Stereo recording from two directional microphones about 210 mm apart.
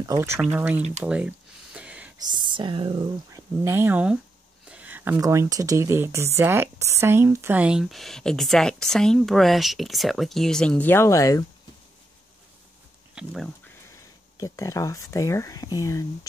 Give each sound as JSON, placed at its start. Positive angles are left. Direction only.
{"t": 0.0, "sound": "speech", "side_deg": -15}
{"t": 1.0, "sound": "a sound", "side_deg": -5}
{"t": 2.2, "sound": "speech", "side_deg": -20}
{"t": 13.1, "sound": "speech", "side_deg": 0}
{"t": 14.3, "sound": "speech", "side_deg": 15}